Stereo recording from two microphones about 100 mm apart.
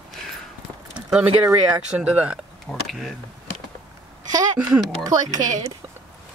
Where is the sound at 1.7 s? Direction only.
15° right (ahead or behind).